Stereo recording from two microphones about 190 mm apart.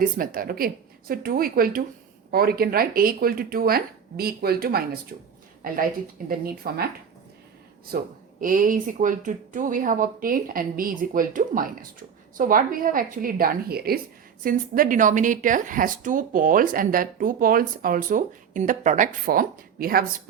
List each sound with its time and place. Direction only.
0.2 s speech: 50° right (ahead or behind)
8.4 s speech: 45° right (ahead or behind)